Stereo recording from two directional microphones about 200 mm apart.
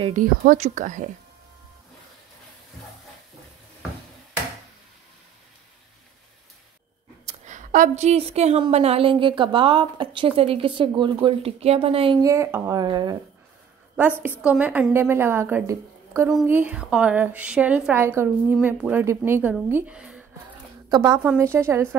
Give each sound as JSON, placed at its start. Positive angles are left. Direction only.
{"t": 0.0, "sound": "speech", "side_deg": -40}
{"t": 7.2, "sound": "a woman's voice", "side_deg": -40}
{"t": 12.3, "sound": "a woman's voice", "side_deg": -15}
{"t": 14.4, "sound": "a woman's voice", "side_deg": -5}
{"t": 20.9, "sound": "a woman's voice", "side_deg": -15}